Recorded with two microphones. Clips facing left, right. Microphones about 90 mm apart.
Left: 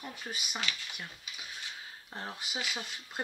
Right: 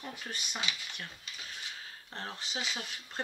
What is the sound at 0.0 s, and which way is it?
Speech, 5° left (ahead or behind).